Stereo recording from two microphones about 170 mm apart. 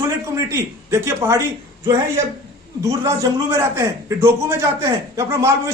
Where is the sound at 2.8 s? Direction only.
20° right (ahead or behind).